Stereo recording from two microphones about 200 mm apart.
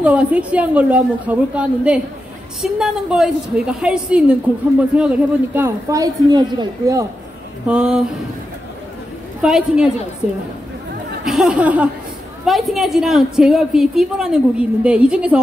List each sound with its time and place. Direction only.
0.0 s a man's voice: 5° right (ahead or behind)
7.6 s a woman's voice: 5° right (ahead or behind)
9.4 s a woman's voice: 5° right (ahead or behind)
11.2 s a woman's voice: 5° right (ahead or behind)